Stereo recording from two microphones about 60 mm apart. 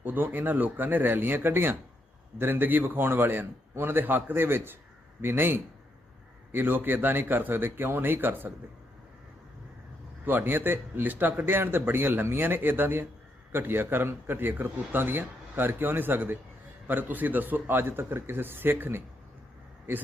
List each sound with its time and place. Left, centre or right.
0.0 s a man's voice: right
10.2 s a man's voice: right